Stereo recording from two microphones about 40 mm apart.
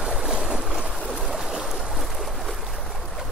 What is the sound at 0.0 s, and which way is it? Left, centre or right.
Boat, centre.